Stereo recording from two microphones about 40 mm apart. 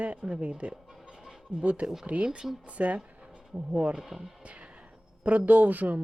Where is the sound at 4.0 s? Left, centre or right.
Centre.